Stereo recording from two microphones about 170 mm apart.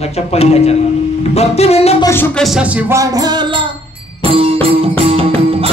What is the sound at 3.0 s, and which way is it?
Music, 20° right (ahead or behind).